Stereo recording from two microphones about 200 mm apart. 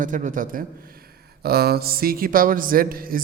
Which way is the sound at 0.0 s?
40° right (ahead or behind).